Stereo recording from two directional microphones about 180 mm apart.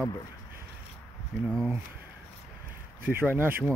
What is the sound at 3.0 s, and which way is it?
Speech, 10° right (ahead or behind).